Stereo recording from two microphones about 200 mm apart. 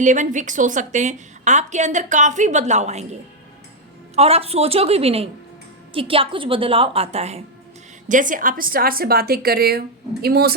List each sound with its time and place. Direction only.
0.0 s a woman's voice: 40° right (ahead or behind)